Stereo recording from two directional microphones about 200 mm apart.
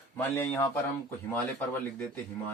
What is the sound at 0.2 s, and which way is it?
Speech, 10° left (ahead or behind).